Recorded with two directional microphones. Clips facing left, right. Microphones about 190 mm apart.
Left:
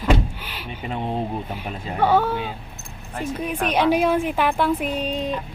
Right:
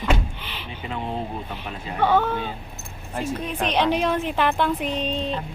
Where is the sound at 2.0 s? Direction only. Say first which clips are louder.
Left 1 dB; 10° left (ahead or behind).